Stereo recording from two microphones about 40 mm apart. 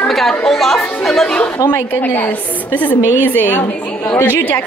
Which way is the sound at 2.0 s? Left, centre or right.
Left.